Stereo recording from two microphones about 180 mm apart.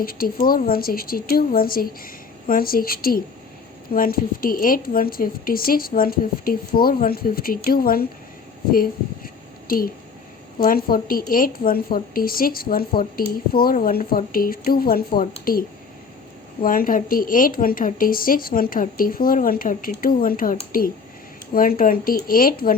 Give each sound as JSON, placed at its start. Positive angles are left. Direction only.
{"t": 0.0, "sound": "a woman's voice", "side_deg": 55}
{"t": 8.7, "sound": "a sound", "side_deg": 55}
{"t": 10.6, "sound": "a woman's voice", "side_deg": 55}
{"t": 16.6, "sound": "a woman's voice", "side_deg": 50}